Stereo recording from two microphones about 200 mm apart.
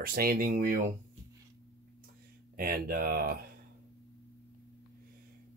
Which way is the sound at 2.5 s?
50° right (ahead or behind).